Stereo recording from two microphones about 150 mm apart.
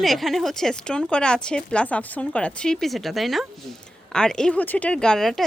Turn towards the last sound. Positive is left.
turn(degrees=5)  # may be behind; listen again after turning